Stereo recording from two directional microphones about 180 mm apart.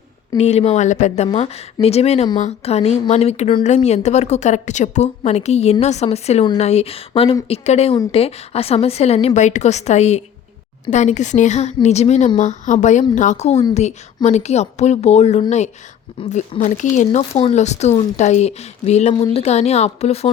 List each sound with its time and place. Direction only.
0.3 s a woman's voice: 35° left (ahead or behind)